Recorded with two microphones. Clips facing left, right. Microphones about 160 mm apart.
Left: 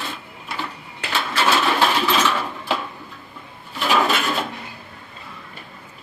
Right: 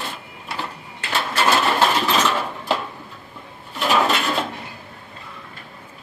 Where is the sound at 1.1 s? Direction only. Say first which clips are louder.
Right 1 dB; centre (ahead or behind).